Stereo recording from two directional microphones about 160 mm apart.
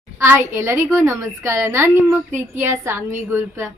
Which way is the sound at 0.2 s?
15° right (ahead or behind).